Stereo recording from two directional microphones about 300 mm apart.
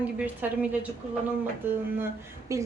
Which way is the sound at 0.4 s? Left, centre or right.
Centre.